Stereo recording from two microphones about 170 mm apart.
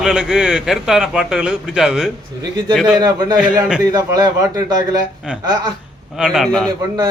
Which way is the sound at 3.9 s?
20° right (ahead or behind).